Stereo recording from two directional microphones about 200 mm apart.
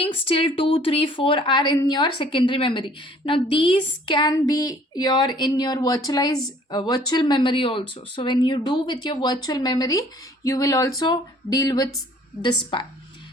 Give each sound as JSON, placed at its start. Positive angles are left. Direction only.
{"t": 0.0, "sound": "a woman's voice", "side_deg": 25}